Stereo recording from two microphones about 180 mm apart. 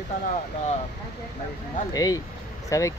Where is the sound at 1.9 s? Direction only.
20° left (ahead or behind).